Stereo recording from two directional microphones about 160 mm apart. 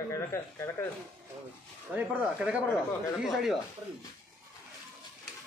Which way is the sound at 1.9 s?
10° right (ahead or behind).